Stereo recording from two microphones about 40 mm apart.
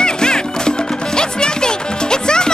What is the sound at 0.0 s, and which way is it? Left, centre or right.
Music, centre.